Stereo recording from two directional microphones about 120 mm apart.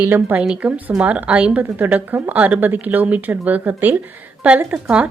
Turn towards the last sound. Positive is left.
turn(degrees=-10)  # may be behind; listen again after turning